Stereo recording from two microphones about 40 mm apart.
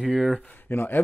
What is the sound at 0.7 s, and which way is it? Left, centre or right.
Speech, left.